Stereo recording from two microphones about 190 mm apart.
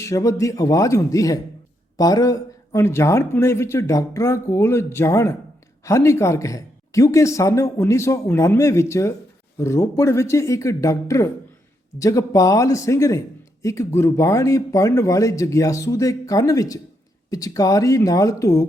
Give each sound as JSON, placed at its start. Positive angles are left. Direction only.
{"t": 0.0, "sound": "speech", "side_deg": 15}